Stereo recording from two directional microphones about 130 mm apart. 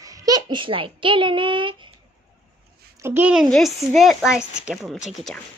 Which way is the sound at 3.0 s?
15° right (ahead or behind).